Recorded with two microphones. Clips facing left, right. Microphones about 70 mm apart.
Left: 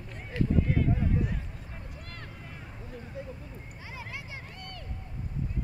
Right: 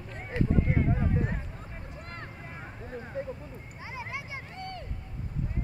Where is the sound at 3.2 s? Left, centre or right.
Right.